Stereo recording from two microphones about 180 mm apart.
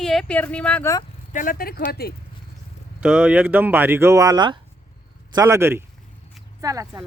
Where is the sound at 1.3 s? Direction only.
50° left (ahead or behind).